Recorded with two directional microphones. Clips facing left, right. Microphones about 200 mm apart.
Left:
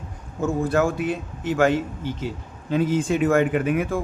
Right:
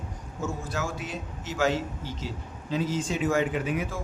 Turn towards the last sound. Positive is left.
turn(degrees=60)  # may be behind; listen again after turning